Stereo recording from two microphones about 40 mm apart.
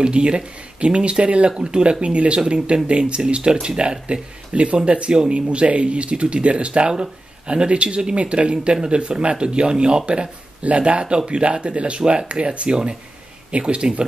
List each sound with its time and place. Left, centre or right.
0.0 s speech: right